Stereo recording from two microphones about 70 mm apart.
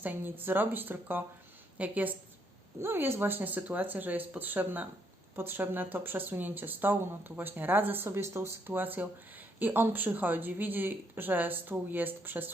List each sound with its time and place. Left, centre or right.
0.0 s speech: right
2.8 s speech: right